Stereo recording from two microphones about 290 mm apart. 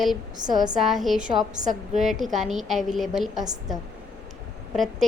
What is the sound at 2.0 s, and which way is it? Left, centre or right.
A woman's voice, centre.